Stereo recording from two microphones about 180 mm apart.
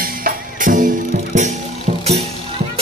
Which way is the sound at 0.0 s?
55° right (ahead or behind).